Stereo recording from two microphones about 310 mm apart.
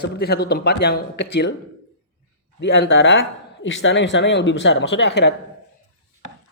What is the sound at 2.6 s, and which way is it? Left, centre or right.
Speech, left.